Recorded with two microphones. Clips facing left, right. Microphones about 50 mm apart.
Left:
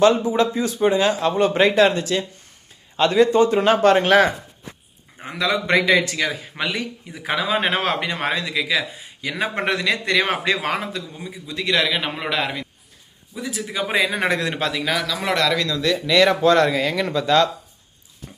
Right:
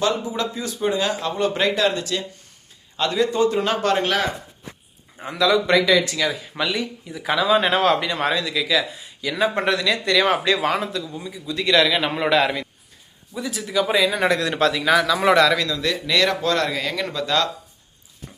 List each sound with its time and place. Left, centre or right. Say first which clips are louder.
0.0 s speech: left 7 dB; left
11.5 s a man's voice: right 3 dB; centre
13.7 s speech: right 7 dB; left
13.9 s speech: even; left
14.5 s a man's voice: right 5 dB; centre
16.2 s speech: left 6 dB; centre
16.6 s speech: left 4 dB; centre